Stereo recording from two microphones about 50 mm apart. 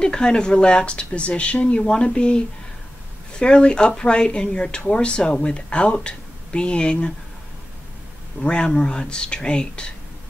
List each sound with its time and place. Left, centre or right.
0.0 s speech: centre
8.4 s speech: centre